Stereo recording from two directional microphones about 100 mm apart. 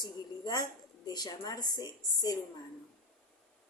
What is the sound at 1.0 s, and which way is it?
A woman's voice, 45° left (ahead or behind).